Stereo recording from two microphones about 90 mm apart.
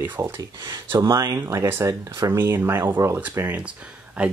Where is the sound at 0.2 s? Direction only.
35° right (ahead or behind).